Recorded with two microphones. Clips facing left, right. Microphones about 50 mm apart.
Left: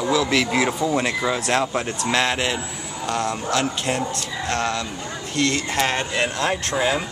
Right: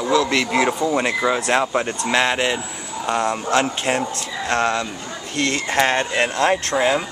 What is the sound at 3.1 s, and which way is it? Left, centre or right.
Speech, right.